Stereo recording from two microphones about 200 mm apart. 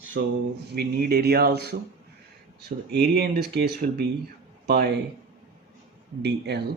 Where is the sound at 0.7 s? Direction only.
50° right (ahead or behind).